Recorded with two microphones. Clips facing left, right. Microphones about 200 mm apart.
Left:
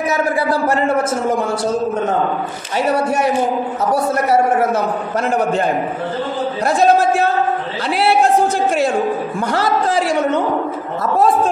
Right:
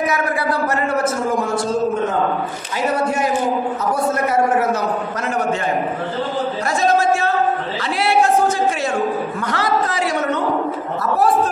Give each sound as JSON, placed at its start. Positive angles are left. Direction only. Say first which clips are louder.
{"t": 6.6, "sound": "a man's voice", "louder": "left 5 dB", "side_deg": 60}
{"t": 9.6, "sound": "a man's voice", "louder": "left 3 dB", "side_deg": 30}